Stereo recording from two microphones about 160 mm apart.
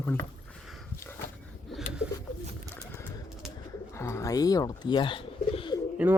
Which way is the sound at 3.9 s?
15° left (ahead or behind).